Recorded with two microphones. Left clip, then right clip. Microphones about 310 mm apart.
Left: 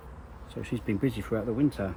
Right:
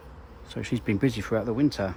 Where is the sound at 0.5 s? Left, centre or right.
Right.